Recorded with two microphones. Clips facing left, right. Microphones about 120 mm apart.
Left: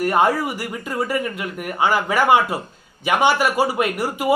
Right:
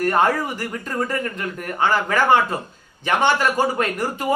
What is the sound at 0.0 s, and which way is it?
Speech, 15° left (ahead or behind).